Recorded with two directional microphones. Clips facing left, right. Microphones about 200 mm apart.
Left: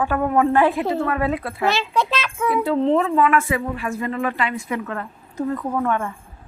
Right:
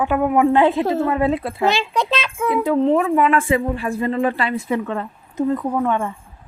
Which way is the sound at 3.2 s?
30° right (ahead or behind).